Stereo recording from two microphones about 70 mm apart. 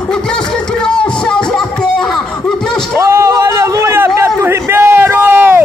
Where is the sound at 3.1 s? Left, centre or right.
Right.